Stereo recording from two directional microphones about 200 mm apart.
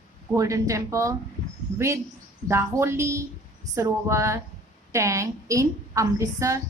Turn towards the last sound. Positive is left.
turn(degrees=-15)  # may be behind; listen again after turning